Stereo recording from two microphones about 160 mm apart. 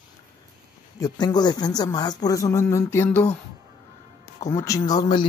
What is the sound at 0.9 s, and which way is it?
Speech, 25° left (ahead or behind).